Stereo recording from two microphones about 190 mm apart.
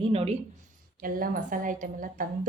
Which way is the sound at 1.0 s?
45° right (ahead or behind).